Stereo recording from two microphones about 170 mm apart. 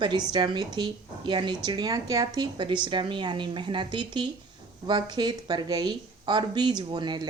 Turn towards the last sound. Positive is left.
turn(degrees=-25)  # may be behind; listen again after turning